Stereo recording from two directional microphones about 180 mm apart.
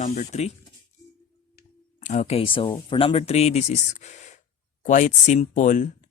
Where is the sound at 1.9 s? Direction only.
40° left (ahead or behind).